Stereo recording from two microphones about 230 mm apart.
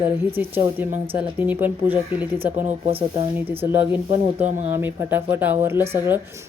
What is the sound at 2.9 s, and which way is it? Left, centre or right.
Speech, right.